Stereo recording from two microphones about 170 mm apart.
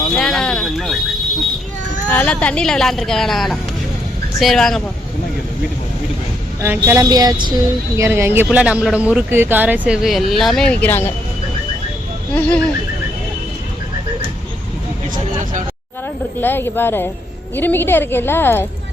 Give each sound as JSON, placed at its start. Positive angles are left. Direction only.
{"t": 0.1, "sound": "a sound", "side_deg": 0}
{"t": 2.0, "sound": "speech", "side_deg": 10}
{"t": 6.6, "sound": "speech", "side_deg": -15}
{"t": 12.3, "sound": "a woman's voice", "side_deg": 5}
{"t": 16.4, "sound": "a woman's voice", "side_deg": 10}